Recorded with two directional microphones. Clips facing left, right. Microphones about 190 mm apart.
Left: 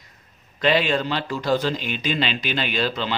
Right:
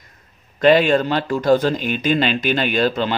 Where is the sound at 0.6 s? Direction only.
45° right (ahead or behind).